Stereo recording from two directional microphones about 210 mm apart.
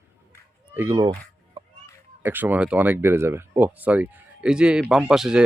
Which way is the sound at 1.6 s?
20° right (ahead or behind).